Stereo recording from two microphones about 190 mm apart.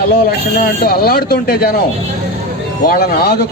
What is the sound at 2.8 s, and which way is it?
Speech, 50° left (ahead or behind).